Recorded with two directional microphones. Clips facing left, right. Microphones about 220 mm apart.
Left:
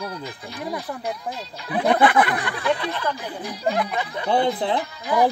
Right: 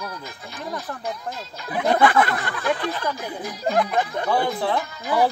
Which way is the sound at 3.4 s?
45° right (ahead or behind).